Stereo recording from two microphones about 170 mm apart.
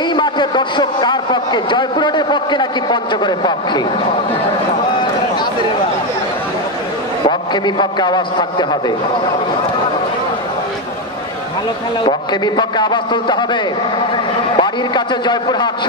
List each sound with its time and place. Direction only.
0.1 s a man's voice: 25° left (ahead or behind)
7.2 s a man's voice: 30° left (ahead or behind)
12.0 s a man's voice: 25° left (ahead or behind)